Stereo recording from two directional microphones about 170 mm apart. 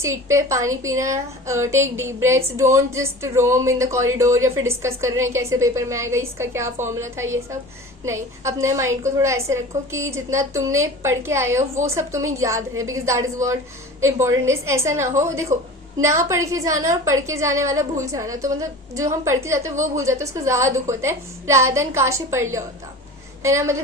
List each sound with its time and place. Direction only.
0.0 s a woman's voice: 15° right (ahead or behind)